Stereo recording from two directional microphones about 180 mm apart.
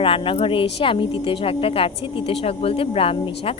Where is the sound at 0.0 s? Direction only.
30° left (ahead or behind).